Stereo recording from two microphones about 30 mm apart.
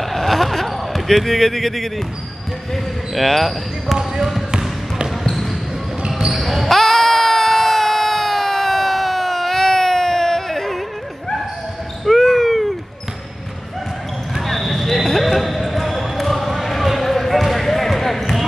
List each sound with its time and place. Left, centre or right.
0.0 s basketball bounce: centre
1.0 s speech: centre
4.5 s basketball bounce: right
6.3 s basketball bounce: centre
12.0 s wail: centre
12.3 s a sound: centre
14.4 s basketball bounce: centre